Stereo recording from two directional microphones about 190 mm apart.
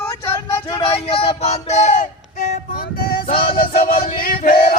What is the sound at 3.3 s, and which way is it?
Music, 30° left (ahead or behind).